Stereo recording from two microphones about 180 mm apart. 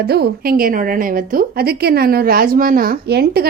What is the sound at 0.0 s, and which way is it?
A woman's voice, 60° right (ahead or behind).